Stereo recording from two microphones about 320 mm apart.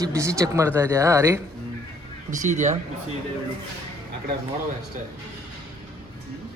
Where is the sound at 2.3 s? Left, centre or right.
Right.